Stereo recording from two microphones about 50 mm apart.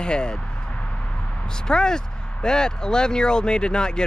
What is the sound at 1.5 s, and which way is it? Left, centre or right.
Speech, centre.